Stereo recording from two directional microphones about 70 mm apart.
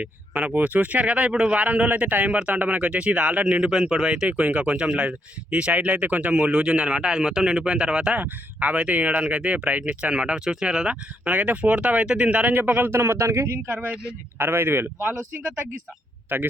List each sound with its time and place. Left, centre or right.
0.0 s speech: right